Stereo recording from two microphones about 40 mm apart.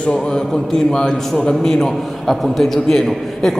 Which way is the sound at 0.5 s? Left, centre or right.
Centre.